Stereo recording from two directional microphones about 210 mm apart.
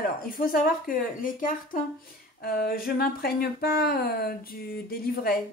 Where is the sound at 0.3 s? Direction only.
45° left (ahead or behind).